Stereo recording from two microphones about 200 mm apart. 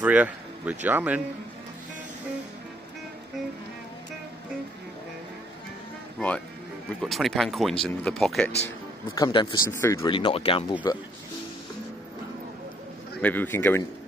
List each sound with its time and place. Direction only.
0.0 s speech: 5° right (ahead or behind)
6.1 s speech: 5° left (ahead or behind)
8.6 s speech: 20° left (ahead or behind)
9.9 s speech: 25° left (ahead or behind)
13.2 s a man's voice: 10° left (ahead or behind)